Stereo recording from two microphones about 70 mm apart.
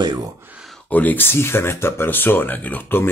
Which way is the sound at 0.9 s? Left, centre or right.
Left.